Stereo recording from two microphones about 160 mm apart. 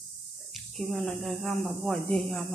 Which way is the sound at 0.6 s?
Centre (ahead or behind).